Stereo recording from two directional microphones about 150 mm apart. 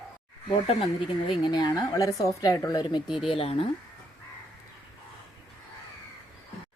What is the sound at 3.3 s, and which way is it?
Speech, 40° left (ahead or behind).